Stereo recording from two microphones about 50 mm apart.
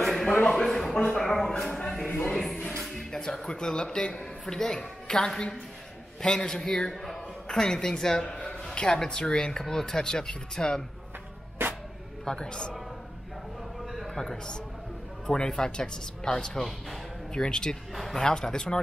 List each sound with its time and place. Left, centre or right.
0.0 s a sound: centre
1.1 s speech: centre
1.7 s a sound: centre
2.2 s speech: centre
11.6 s music: right
12.3 s speech: centre
14.0 s speech: centre
17.9 s speech: centre
18.2 s speech: centre